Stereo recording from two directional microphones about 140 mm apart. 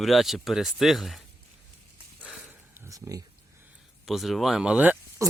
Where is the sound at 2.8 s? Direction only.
25° right (ahead or behind).